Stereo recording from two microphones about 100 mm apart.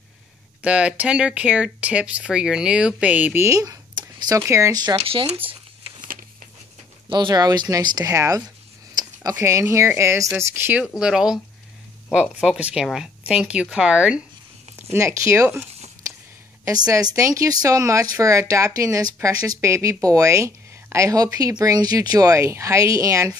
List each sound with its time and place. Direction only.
0.6 s speech: 10° right (ahead or behind)
3.3 s speech: 30° right (ahead or behind)
5.4 s speech: 65° right (ahead or behind)
7.1 s speech: 50° right (ahead or behind); by 10.8 s 25° right (ahead or behind)
11.0 s speech: 5° right (ahead or behind)
14.9 s speech: 25° right (ahead or behind)
16.6 s speech: 35° right (ahead or behind)